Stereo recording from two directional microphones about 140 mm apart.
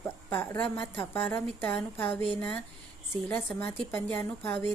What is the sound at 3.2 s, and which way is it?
A woman's voice, 15° left (ahead or behind).